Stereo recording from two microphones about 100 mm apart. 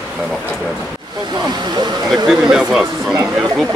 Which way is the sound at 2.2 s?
5° right (ahead or behind).